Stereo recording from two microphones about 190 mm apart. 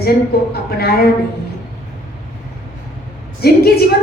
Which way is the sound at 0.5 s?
55° left (ahead or behind).